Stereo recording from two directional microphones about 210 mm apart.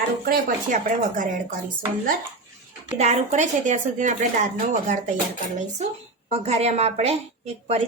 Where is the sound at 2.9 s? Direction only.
30° right (ahead or behind).